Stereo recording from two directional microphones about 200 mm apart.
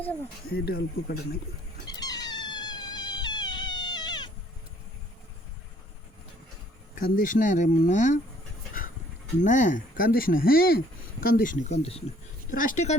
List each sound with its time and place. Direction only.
0.5 s speech: 50° left (ahead or behind)
1.9 s cat: 20° left (ahead or behind)
6.9 s speech: 40° left (ahead or behind)
9.4 s speech: 40° left (ahead or behind)
12.5 s speech: 40° left (ahead or behind)